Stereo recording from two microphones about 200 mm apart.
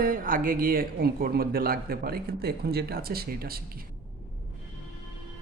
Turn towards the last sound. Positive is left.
turn(degrees=-50)  # may be behind; listen again after turning